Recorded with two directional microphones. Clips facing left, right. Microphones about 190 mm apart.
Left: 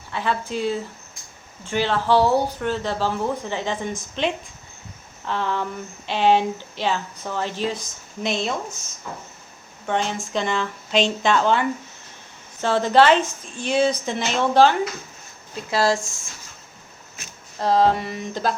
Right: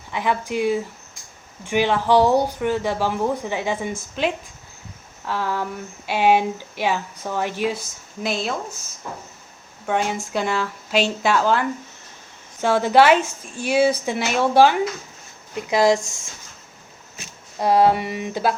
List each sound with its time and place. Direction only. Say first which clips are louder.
0.1 s speech: right 2 dB; 15° right (ahead or behind)
8.2 s speech: even; centre (ahead or behind)
9.8 s speech: right 2 dB; 10° right (ahead or behind)
17.6 s speech: right 2 dB; 10° right (ahead or behind)